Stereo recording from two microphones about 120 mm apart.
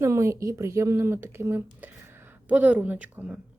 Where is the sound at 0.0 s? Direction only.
25° right (ahead or behind).